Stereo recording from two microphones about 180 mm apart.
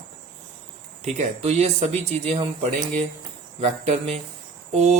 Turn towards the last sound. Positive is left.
turn(degrees=-40)  # may be behind; listen again after turning